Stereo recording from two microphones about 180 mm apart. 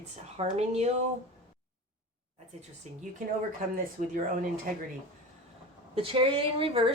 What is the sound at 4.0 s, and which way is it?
Speech, 45° right (ahead or behind).